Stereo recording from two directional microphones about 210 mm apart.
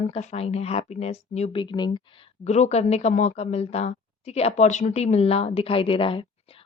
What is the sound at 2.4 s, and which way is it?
Speech, 30° left (ahead or behind).